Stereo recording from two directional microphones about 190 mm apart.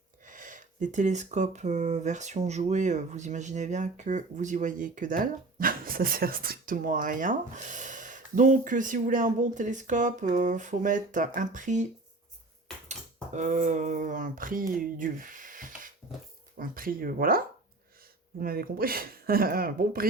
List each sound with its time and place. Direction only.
0.3 s speech: 45° right (ahead or behind)
13.3 s speech: 40° right (ahead or behind)